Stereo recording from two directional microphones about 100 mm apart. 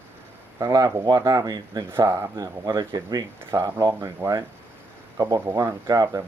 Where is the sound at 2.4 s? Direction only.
45° right (ahead or behind).